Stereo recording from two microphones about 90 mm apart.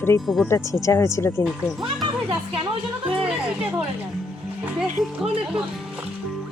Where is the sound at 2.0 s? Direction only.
55° right (ahead or behind).